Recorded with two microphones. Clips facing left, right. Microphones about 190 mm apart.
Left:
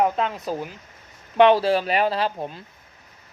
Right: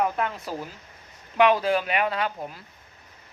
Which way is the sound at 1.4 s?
30° left (ahead or behind).